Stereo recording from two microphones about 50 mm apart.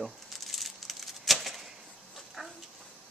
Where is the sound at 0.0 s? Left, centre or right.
Centre.